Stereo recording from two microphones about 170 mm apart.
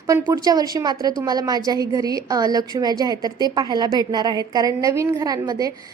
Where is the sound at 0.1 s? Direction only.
20° right (ahead or behind).